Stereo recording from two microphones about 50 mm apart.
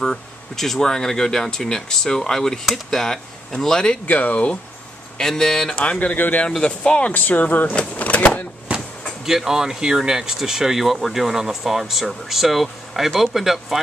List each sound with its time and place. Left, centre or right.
0.0 s speech: centre
4.1 s speech: left
5.1 s speech: centre
5.8 s speech: left
6.6 s speech: centre
7.1 s speech: left
8.7 s a sound: right
9.2 s speech: centre